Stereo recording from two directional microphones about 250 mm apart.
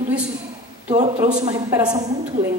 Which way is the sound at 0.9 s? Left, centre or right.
Right.